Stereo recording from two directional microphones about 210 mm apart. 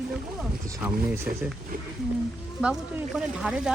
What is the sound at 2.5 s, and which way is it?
Speech, 5° right (ahead or behind).